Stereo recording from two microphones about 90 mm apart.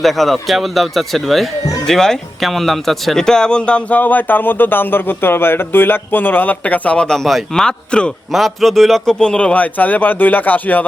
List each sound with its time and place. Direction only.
0.0 s speech: centre (ahead or behind)
1.6 s a sound: 40° left (ahead or behind)
1.9 s speech: 5° left (ahead or behind)